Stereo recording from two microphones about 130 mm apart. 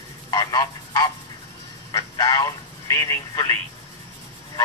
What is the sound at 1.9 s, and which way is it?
Speech, 25° left (ahead or behind).